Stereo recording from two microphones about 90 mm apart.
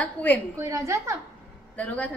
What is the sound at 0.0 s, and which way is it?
Speech, 20° left (ahead or behind).